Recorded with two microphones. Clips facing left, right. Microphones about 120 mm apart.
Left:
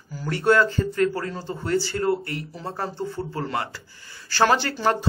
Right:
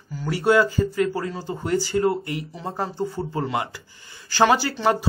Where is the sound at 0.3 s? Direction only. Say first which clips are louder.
Right 1 dB; 10° right (ahead or behind).